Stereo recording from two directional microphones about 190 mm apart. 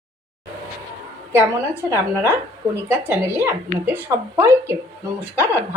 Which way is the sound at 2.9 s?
10° right (ahead or behind).